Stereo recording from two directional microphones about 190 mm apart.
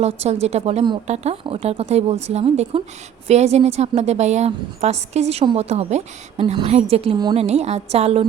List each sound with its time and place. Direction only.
0.0 s a woman's voice: 35° right (ahead or behind)